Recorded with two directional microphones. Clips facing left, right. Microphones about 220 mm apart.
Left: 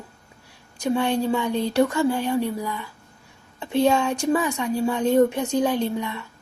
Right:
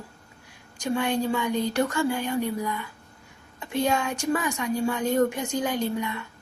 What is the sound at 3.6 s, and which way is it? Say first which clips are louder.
A woman's voice: left 5 dB; 25° left (ahead or behind).